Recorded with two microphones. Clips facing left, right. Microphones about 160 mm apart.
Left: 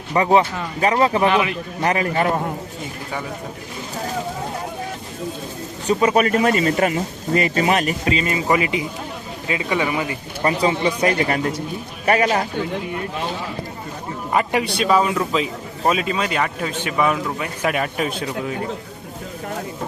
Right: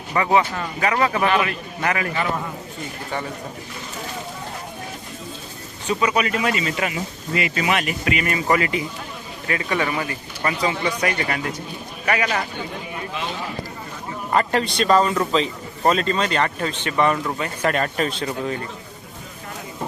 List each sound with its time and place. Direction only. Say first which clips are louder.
0.1 s a man's voice: left 3 dB; 30° left (ahead or behind)
1.3 s a man's voice: left 2 dB; 15° left (ahead or behind)
1.8 s speech: left 4 dB; 35° left (ahead or behind)
5.9 s a man's voice: left 5 dB; 45° left (ahead or behind); by 10.2 s 15° left (ahead or behind)
10.4 s a man's voice: left 4 dB; 30° left (ahead or behind)
14.3 s a man's voice: even; 10° left (ahead or behind)